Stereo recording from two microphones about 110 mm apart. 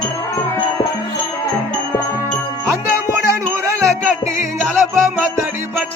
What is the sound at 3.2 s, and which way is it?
Music, 25° right (ahead or behind).